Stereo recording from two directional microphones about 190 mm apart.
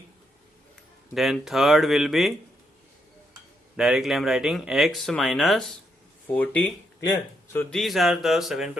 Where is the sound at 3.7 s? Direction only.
5° right (ahead or behind).